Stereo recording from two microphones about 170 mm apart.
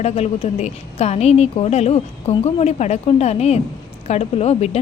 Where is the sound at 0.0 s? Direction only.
40° left (ahead or behind).